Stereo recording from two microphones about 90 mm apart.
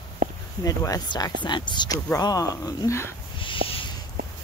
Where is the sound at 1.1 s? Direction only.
55° left (ahead or behind).